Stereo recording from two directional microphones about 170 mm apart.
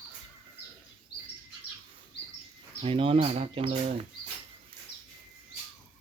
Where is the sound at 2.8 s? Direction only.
35° right (ahead or behind).